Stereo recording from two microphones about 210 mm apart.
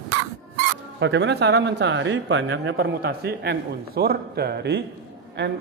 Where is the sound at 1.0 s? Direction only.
55° right (ahead or behind).